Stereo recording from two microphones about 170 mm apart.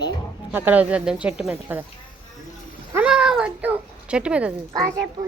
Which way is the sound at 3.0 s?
5° right (ahead or behind).